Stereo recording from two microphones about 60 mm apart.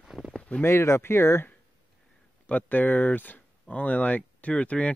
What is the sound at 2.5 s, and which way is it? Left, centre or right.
Speech, left.